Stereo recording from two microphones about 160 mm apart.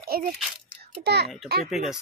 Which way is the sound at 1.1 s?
90° right.